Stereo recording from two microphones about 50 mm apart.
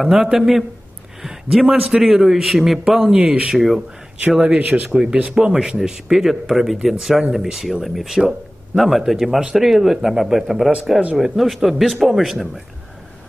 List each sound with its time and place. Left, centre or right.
0.0 s speech: centre
4.4 s speech: right; by 12.4 s centre